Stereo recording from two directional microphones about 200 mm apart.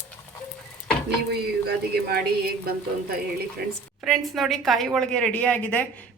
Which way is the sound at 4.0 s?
Centre (ahead or behind).